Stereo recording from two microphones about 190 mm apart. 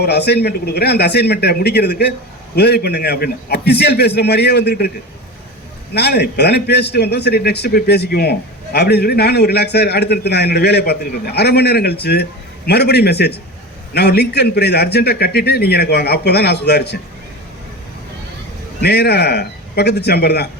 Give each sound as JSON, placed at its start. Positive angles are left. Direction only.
{"t": 0.0, "sound": "a man's voice", "side_deg": 60}
{"t": 5.9, "sound": "a man's voice", "side_deg": 60}
{"t": 18.8, "sound": "a man's voice", "side_deg": 60}